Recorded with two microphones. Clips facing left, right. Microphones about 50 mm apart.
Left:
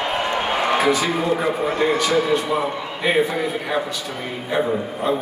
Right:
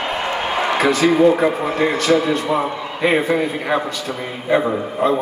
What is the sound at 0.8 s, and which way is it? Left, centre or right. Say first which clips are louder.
Speech: right 7 dB; right.